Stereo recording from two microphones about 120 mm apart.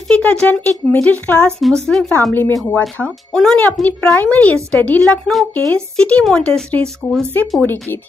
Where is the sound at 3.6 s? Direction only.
15° left (ahead or behind).